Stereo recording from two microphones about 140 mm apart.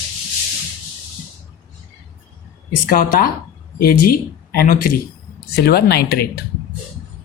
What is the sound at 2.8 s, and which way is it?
Speech, 85° left.